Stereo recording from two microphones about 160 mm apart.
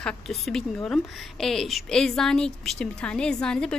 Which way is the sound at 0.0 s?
Centre (ahead or behind).